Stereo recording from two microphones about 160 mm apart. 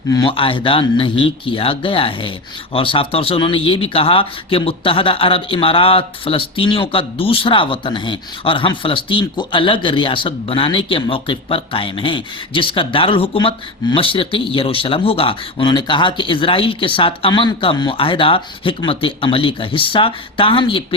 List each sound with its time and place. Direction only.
0.1 s speech: 30° left (ahead or behind)